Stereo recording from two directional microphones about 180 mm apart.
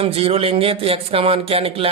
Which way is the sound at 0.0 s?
35° right (ahead or behind).